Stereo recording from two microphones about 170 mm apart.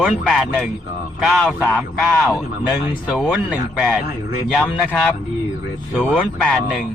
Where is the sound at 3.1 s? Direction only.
5° right (ahead or behind).